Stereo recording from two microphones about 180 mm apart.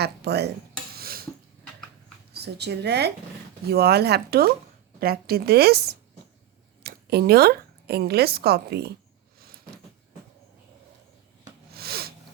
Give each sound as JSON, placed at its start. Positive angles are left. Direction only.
{"t": 0.0, "sound": "speech", "side_deg": -65}
{"t": 0.9, "sound": "dishes", "side_deg": -55}
{"t": 2.3, "sound": "a woman's voice", "side_deg": -65}
{"t": 9.4, "sound": "a sound", "side_deg": -55}
{"t": 11.7, "sound": "snort", "side_deg": -60}